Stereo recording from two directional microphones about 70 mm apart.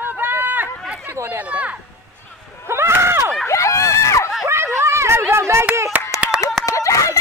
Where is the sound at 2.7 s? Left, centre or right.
Right.